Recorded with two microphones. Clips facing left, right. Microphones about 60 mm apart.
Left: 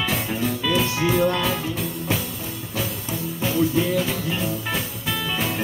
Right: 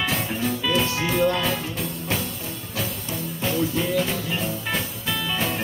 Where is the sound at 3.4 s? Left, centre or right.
Centre.